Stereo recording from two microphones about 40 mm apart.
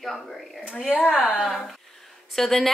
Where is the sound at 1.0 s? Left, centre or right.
Left.